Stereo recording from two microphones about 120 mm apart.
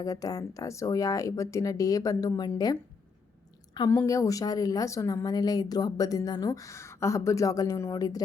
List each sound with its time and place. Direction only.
0.0 s a woman's voice: 30° left (ahead or behind)
3.8 s a woman's voice: 25° left (ahead or behind)